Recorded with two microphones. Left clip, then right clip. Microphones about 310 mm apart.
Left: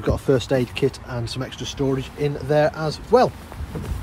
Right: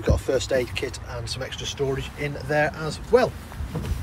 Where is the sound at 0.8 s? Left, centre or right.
Left.